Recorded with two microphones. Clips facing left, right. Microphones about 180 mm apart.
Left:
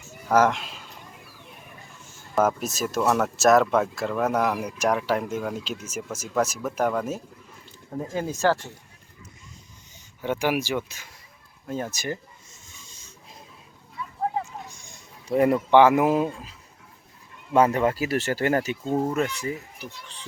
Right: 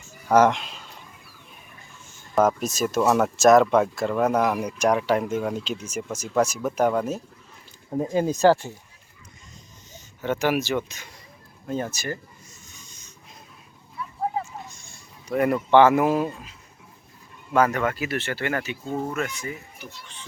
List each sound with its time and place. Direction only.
0.3 s speech: centre (ahead or behind)
2.3 s speech: centre (ahead or behind)
7.9 s speech: 20° right (ahead or behind)
10.2 s speech: 10° left (ahead or behind)
14.7 s a sound: 15° left (ahead or behind)
15.3 s speech: 25° left (ahead or behind)
15.5 s speech: 10° left (ahead or behind)
17.5 s speech: 30° left (ahead or behind)